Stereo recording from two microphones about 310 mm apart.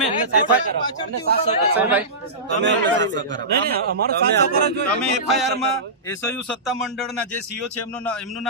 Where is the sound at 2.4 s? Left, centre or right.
Right.